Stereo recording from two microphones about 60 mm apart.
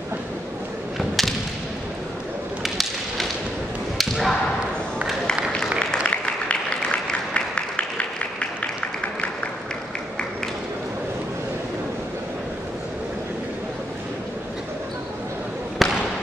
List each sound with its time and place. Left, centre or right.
0.9 s whip: centre
2.6 s whip: centre
4.0 s a sound: centre
6.0 s applause: centre
15.8 s basketball bounce: centre